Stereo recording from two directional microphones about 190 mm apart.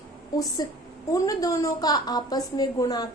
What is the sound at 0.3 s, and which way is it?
A woman's voice, 20° left (ahead or behind).